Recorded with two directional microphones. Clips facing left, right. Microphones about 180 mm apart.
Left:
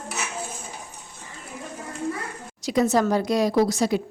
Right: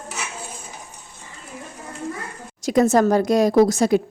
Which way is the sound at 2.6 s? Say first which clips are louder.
Right 4 dB; 50° right (ahead or behind).